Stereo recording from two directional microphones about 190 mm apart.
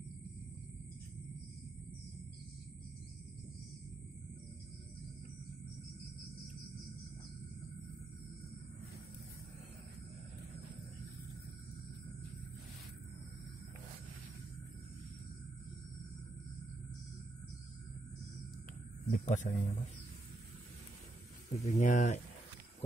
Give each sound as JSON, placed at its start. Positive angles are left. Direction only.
{"t": 19.0, "sound": "speech", "side_deg": 40}
{"t": 21.5, "sound": "speech", "side_deg": 40}